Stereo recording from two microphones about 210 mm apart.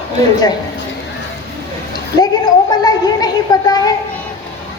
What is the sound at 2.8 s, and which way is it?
A woman's voice, 20° left (ahead or behind).